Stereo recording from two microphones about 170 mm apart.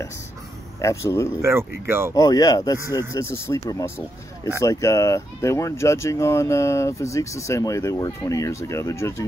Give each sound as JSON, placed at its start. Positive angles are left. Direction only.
{"t": 0.7, "sound": "speech", "side_deg": 15}
{"t": 1.3, "sound": "speech", "side_deg": -15}
{"t": 2.1, "sound": "speech", "side_deg": 20}